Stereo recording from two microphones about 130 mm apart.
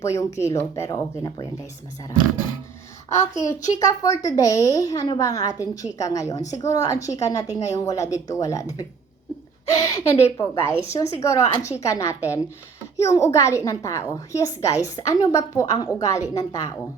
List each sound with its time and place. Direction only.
0.0 s a woman's voice: 20° left (ahead or behind)
3.1 s a woman's voice: 25° left (ahead or behind)